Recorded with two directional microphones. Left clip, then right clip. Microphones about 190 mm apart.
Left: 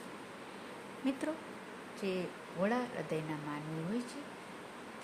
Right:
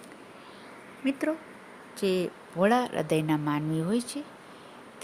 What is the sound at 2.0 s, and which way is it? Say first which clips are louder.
Speech: right 11 dB; 55° right (ahead or behind).